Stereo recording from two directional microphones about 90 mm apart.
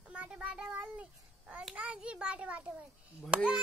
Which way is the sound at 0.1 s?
15° right (ahead or behind).